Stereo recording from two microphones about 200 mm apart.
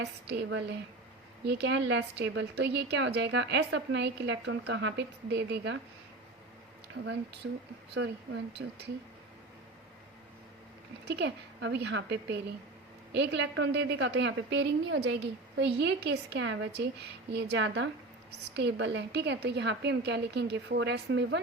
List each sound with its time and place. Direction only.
0.0 s a woman's voice: 60° right (ahead or behind)
7.0 s a woman's voice: 60° right (ahead or behind)
11.0 s a woman's voice: 60° right (ahead or behind)